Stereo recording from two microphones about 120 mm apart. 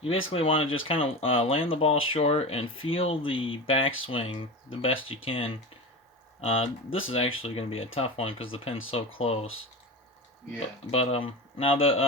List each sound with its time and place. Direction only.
0.0 s speech: 50° left (ahead or behind)
10.9 s speech: 55° left (ahead or behind)